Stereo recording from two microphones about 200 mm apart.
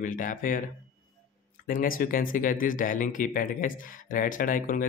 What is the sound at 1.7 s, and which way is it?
Speech, 45° left (ahead or behind).